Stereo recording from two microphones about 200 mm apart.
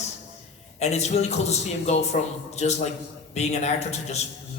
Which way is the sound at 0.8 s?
35° left (ahead or behind).